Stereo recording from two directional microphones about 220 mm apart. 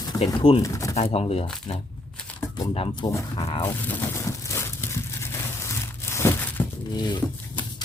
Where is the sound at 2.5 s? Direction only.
25° left (ahead or behind).